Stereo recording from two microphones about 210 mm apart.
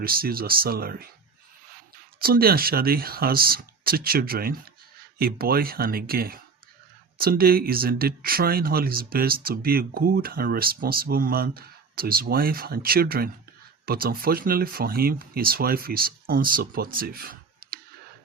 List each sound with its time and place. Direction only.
0.0 s speech: 45° right (ahead or behind)
2.1 s speech: 45° right (ahead or behind)